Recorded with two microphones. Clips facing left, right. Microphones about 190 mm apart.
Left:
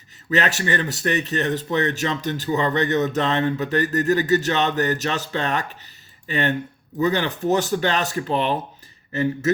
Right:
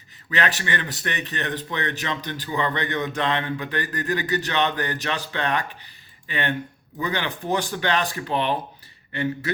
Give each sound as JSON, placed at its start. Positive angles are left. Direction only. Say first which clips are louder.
{"t": 0.3, "sound": "speech", "louder": "left 4 dB", "side_deg": 40}